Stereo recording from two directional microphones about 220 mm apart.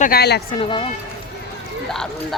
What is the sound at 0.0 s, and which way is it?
Speech, 45° left (ahead or behind).